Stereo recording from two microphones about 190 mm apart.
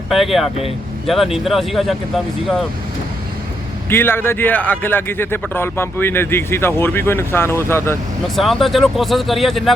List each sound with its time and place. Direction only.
0.1 s speech: centre (ahead or behind)
3.8 s a man's voice: 10° left (ahead or behind)
8.4 s speech: centre (ahead or behind)